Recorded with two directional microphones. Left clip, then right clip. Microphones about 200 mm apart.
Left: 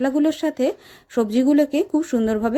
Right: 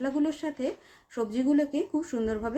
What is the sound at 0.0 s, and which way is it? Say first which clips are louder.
Speech: left 9 dB; 40° left (ahead or behind).